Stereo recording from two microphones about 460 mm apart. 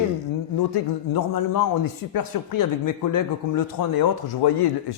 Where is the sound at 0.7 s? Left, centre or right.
Left.